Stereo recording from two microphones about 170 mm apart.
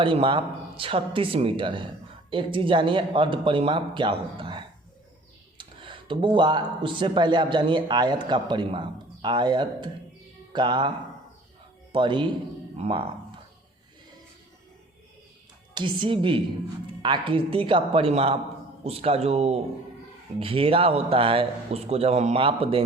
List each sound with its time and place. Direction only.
0.0 s a man's voice: 30° right (ahead or behind)
15.7 s a man's voice: 30° right (ahead or behind)